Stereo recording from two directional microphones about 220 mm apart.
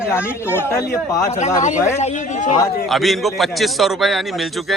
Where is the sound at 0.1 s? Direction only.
10° left (ahead or behind).